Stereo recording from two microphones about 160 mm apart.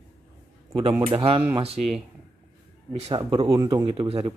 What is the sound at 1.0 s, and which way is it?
Speech, 35° right (ahead or behind).